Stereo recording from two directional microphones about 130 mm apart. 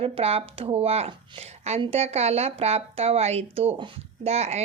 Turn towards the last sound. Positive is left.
turn(degrees=-55)  # may be behind; listen again after turning